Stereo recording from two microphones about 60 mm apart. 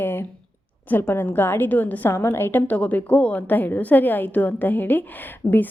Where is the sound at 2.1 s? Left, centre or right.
Left.